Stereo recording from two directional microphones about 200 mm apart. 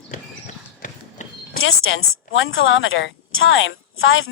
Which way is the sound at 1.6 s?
85° left.